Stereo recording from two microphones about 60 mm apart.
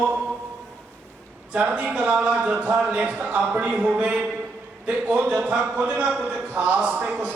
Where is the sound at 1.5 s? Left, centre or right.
Right.